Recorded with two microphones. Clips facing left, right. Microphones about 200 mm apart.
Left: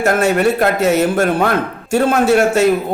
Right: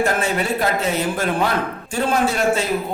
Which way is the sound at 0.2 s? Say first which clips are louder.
Left 7 dB; 60° left (ahead or behind).